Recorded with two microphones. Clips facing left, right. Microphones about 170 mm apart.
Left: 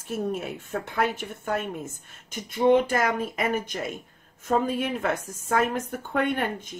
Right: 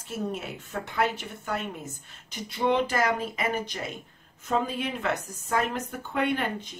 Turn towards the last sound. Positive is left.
turn(degrees=55)  # may be behind; listen again after turning